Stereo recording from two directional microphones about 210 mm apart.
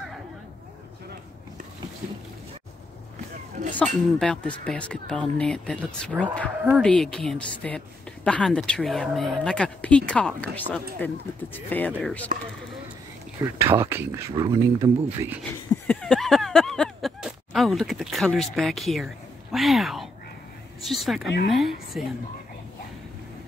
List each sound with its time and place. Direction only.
3.7 s speech: 5° left (ahead or behind)
13.6 s speech: 10° right (ahead or behind)
15.7 s a sound: 5° left (ahead or behind)
19.5 s speech: centre (ahead or behind)